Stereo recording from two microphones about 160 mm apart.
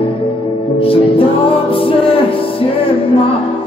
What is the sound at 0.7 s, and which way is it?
Music, 35° left (ahead or behind).